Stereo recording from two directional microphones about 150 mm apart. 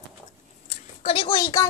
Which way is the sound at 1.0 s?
40° left (ahead or behind).